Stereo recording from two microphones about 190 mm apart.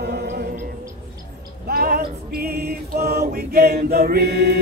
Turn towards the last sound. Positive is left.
turn(degrees=-55)  # may be behind; listen again after turning